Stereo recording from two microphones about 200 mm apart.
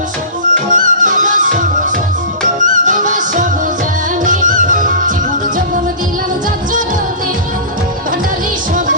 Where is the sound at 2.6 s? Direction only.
40° right (ahead or behind).